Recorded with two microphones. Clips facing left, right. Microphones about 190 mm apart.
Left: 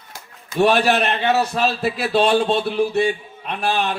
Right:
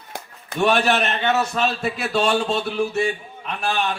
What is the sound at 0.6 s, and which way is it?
A man's voice, 35° left (ahead or behind).